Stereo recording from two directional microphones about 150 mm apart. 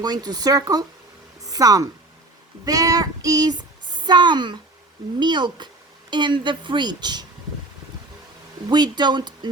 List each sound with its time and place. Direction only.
0.0 s a woman's voice: 25° right (ahead or behind)
8.7 s speech: 30° right (ahead or behind)